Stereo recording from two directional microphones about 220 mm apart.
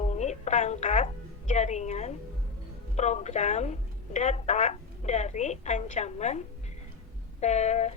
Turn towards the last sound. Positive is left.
turn(degrees=30)  # may be behind; listen again after turning